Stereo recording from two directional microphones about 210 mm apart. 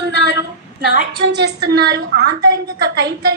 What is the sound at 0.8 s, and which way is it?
A woman's voice, 50° right (ahead or behind).